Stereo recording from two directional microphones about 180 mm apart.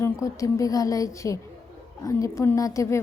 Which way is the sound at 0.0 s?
15° left (ahead or behind).